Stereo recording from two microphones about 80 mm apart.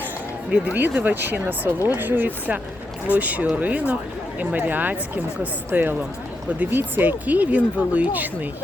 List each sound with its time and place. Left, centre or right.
0.5 s speech: right